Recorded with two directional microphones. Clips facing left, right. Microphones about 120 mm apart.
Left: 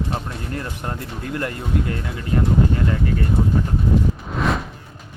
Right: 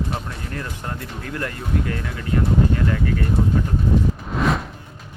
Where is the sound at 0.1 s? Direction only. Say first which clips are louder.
Left 2 dB; 30° left (ahead or behind).